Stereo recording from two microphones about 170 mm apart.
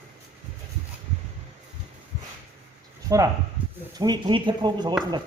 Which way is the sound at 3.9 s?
25° right (ahead or behind).